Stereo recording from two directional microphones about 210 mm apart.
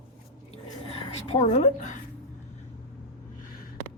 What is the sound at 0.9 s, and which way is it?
A woman's voice, 30° left (ahead or behind).